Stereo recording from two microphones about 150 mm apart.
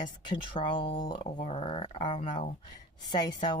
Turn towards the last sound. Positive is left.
turn(degrees=25)  # may be behind; listen again after turning